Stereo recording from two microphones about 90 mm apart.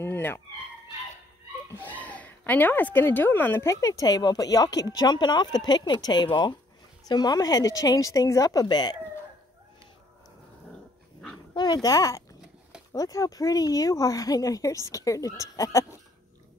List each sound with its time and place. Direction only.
0.0 s chicken: 25° left (ahead or behind)
1.7 s speech: 20° left (ahead or behind); by 8.9 s 55° left (ahead or behind)
11.5 s speech: 50° left (ahead or behind)